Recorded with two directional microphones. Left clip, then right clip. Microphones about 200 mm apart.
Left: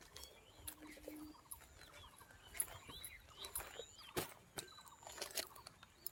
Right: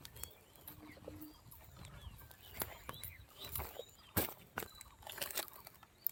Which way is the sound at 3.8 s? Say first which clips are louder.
Right 3 dB; 15° right (ahead or behind).